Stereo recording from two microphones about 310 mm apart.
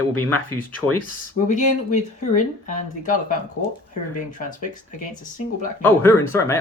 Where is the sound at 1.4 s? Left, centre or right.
Left.